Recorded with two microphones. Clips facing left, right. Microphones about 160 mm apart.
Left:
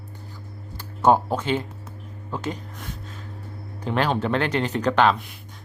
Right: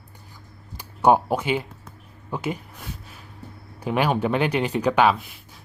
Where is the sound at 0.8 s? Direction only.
15° right (ahead or behind).